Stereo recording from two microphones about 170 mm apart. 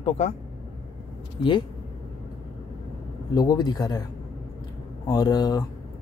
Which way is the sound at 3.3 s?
25° left (ahead or behind).